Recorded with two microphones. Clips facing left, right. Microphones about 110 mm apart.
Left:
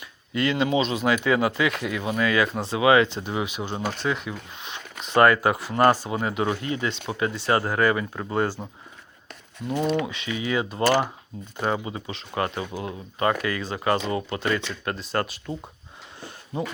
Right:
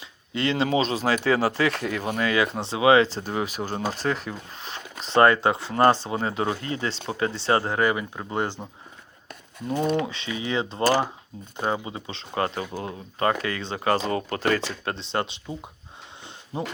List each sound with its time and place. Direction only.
0.0 s speech: 30° right (ahead or behind)
9.3 s a sound: 40° right (ahead or behind)
10.0 s speech: 30° right (ahead or behind)
11.5 s speech: 25° right (ahead or behind)
16.5 s speech: 30° right (ahead or behind)